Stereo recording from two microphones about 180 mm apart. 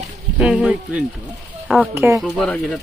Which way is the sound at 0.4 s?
5° right (ahead or behind).